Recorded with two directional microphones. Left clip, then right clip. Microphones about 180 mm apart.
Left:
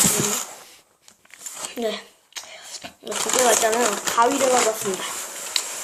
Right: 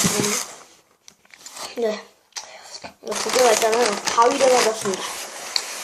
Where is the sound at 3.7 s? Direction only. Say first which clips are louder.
Right 2 dB; centre (ahead or behind).